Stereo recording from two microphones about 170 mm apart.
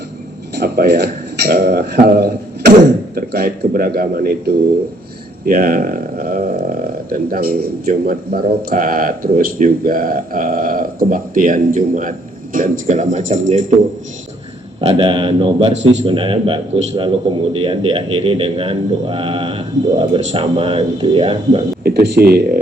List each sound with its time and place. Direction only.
0.5 s a man's voice: 75° right (ahead or behind); by 13.4 s 45° right (ahead or behind)
14.8 s speech: 30° right (ahead or behind)
21.8 s speech: 70° right (ahead or behind)